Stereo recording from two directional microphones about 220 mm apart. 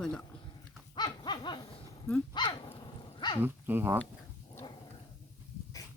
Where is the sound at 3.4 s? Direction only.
10° right (ahead or behind).